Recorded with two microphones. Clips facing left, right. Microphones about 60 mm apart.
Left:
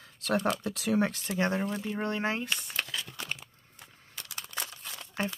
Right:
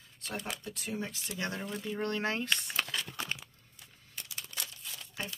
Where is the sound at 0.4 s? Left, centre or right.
Left.